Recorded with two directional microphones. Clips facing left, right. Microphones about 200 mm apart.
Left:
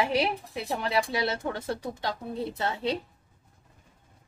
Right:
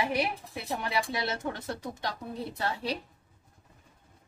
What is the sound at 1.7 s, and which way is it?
A woman's voice, 25° left (ahead or behind).